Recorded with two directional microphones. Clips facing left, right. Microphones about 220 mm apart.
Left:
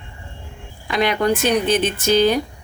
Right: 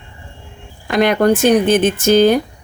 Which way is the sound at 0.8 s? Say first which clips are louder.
Right 6 dB; 50° right (ahead or behind).